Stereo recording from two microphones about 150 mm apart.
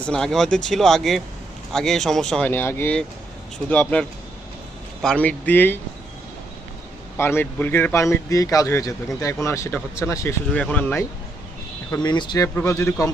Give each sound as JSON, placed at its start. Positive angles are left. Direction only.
{"t": 0.0, "sound": "speech", "side_deg": 5}
{"t": 2.5, "sound": "speech", "side_deg": 15}
{"t": 5.0, "sound": "speech", "side_deg": 10}
{"t": 7.2, "sound": "a man's voice", "side_deg": 15}
{"t": 11.9, "sound": "a man's voice", "side_deg": 30}
{"t": 12.5, "sound": "a man's voice", "side_deg": 20}